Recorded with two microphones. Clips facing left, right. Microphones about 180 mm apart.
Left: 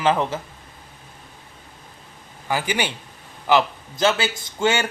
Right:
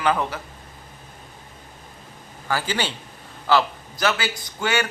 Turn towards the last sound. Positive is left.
turn(degrees=25)  # may be behind; listen again after turning